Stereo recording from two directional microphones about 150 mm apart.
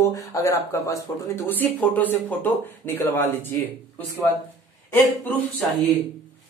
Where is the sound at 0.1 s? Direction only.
20° left (ahead or behind).